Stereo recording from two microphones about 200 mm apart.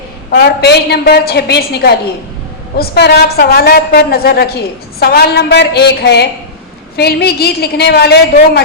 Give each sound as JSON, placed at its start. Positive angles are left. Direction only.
{"t": 0.3, "sound": "a woman's voice", "side_deg": 55}